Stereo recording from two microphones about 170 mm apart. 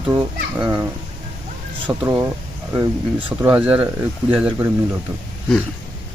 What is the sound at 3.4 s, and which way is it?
Speech, 10° right (ahead or behind).